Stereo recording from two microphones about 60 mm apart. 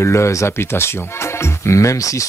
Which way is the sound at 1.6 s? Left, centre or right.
Left.